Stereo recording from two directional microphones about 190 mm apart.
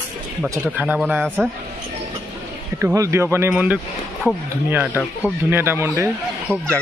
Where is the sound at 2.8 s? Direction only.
15° right (ahead or behind).